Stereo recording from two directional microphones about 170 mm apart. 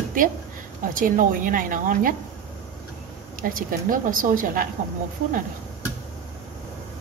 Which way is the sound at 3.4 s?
55° right (ahead or behind).